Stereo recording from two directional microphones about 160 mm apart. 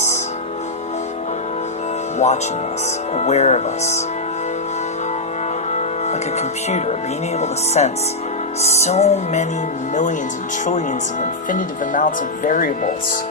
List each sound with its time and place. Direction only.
2.1 s speech: 45° left (ahead or behind)
3.2 s music: 45° left (ahead or behind)
5.7 s music: 45° left (ahead or behind)
10.7 s speech: 50° left (ahead or behind)